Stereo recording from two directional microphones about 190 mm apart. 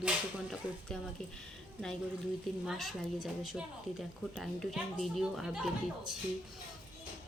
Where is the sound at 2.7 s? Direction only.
Centre (ahead or behind).